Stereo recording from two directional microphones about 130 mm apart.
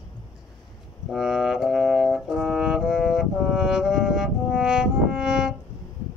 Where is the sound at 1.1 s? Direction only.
5° right (ahead or behind).